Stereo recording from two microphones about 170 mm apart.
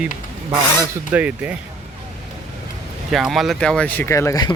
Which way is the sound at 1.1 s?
10° right (ahead or behind).